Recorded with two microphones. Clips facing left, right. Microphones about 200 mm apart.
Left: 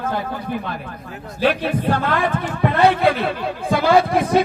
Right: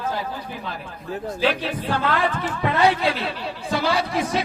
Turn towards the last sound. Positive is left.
turn(degrees=55)  # may be behind; listen again after turning